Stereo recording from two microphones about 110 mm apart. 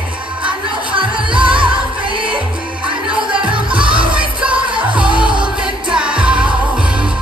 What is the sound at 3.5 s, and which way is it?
Music, 50° right (ahead or behind).